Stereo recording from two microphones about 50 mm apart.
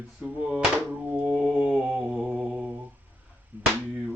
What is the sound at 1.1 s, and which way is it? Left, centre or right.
Mantra, right.